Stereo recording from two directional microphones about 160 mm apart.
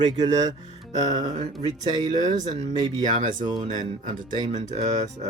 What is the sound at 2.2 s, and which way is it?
Speech, 50° right (ahead or behind).